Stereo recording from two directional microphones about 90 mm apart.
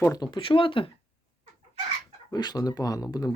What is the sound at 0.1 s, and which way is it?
Speech, 50° left (ahead or behind).